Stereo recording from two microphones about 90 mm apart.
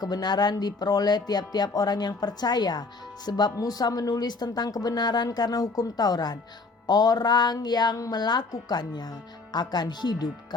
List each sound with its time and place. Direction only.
0.0 s a woman's voice: 50° left (ahead or behind)